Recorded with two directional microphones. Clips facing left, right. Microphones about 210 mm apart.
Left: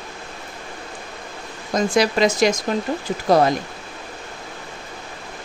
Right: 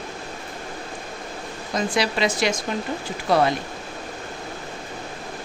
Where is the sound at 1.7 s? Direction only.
45° left (ahead or behind).